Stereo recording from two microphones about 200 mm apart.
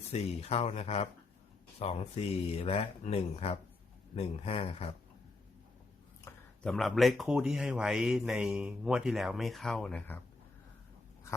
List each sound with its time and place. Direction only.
0.1 s speech: 30° left (ahead or behind)
6.2 s speech: 5° left (ahead or behind)